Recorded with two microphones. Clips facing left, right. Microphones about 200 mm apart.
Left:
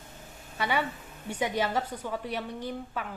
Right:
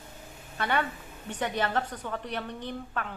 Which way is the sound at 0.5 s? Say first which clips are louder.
Even; 10° left (ahead or behind).